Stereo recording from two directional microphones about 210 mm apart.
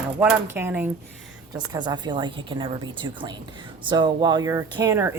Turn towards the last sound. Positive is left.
turn(degrees=-15)  # may be behind; listen again after turning